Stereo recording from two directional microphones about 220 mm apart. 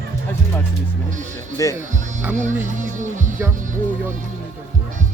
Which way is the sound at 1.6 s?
15° left (ahead or behind).